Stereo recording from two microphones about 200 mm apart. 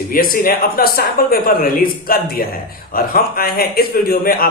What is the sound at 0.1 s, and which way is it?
Speech, 45° left (ahead or behind).